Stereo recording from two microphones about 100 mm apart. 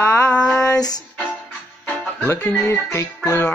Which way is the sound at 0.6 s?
40° left (ahead or behind).